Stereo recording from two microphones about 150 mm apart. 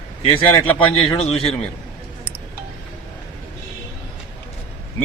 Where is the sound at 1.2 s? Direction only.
40° left (ahead or behind).